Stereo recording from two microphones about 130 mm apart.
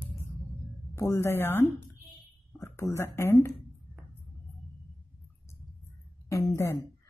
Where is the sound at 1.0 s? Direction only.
20° left (ahead or behind).